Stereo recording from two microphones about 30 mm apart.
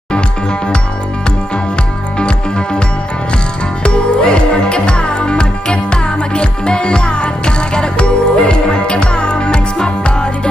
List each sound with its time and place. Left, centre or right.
2.1 s music: left
3.8 s music: left